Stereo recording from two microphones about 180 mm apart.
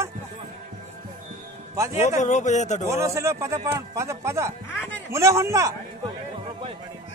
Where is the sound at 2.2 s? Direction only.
40° left (ahead or behind).